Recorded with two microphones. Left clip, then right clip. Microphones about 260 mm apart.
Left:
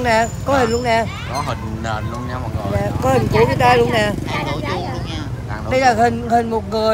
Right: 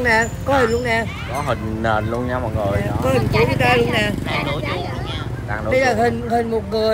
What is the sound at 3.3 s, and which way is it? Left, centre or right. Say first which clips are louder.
Speech: left 4 dB; left.